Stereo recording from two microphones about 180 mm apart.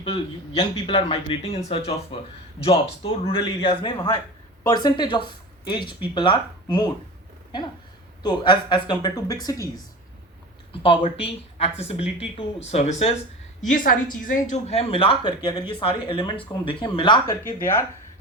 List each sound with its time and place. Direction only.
0.0 s speech: 25° left (ahead or behind)
8.2 s speech: 25° left (ahead or behind)
13.7 s speech: 50° left (ahead or behind); by 17.3 s 25° left (ahead or behind)
17.6 s speech: 15° left (ahead or behind)